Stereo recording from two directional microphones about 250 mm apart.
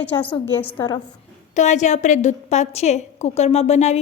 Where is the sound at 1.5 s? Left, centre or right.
Left.